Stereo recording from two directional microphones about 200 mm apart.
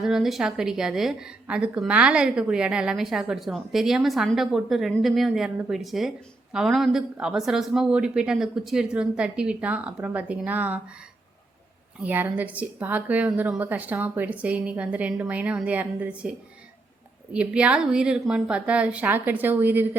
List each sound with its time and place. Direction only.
0.0 s a woman's voice: centre (ahead or behind)
12.0 s speech: 10° right (ahead or behind)
17.3 s a woman's voice: 5° right (ahead or behind)